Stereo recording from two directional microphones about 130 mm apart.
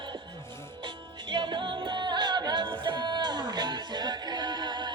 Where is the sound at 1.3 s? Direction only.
35° right (ahead or behind).